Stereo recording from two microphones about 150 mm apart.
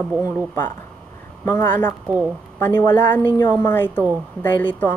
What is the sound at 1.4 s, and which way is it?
A woman's voice, 15° left (ahead or behind).